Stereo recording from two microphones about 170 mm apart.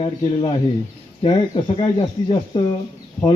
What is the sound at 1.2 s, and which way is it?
Speech, 30° left (ahead or behind).